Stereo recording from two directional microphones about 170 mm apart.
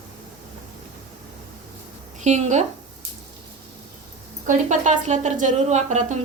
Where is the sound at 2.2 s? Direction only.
45° right (ahead or behind).